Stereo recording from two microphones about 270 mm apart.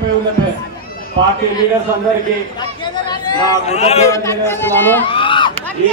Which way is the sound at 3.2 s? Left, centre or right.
Centre.